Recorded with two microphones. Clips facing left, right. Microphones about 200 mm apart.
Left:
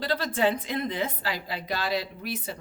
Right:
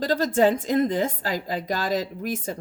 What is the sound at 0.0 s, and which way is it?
Speech, 45° right (ahead or behind).